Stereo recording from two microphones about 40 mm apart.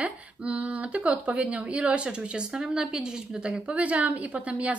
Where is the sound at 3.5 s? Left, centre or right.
Right.